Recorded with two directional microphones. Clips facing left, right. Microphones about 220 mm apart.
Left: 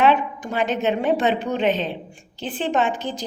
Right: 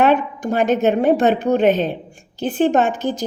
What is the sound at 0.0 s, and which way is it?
A woman's voice, 45° right (ahead or behind).